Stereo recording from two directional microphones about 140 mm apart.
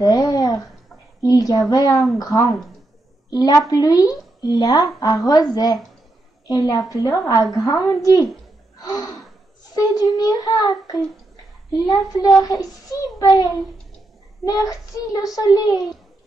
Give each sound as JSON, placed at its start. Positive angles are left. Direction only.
{"t": 0.0, "sound": "a woman's voice", "side_deg": 25}